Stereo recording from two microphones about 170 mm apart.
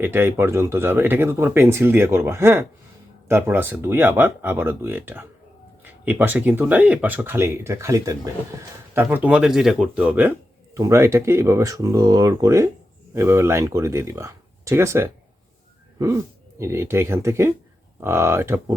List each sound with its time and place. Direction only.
0.0 s speech: 10° right (ahead or behind)
9.0 s speech: 10° right (ahead or behind)